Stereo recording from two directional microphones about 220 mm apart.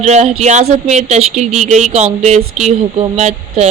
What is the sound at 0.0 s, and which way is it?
A woman's voice, 30° right (ahead or behind).